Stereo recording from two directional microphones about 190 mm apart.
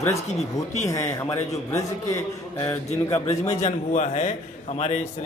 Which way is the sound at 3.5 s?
40° left (ahead or behind).